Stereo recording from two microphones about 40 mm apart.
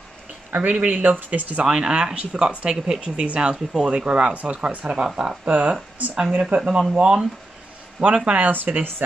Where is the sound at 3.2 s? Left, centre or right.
Right.